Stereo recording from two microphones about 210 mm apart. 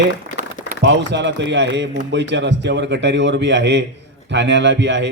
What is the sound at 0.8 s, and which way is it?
A man's voice, 55° right (ahead or behind).